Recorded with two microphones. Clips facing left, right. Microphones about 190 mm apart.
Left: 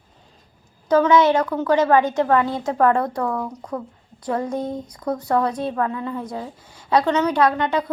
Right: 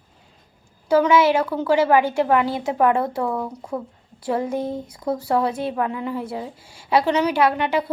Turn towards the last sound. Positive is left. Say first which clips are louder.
# even
turn(degrees=-10)  # may be behind; listen again after turning